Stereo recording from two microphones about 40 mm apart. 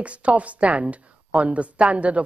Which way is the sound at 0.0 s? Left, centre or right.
Right.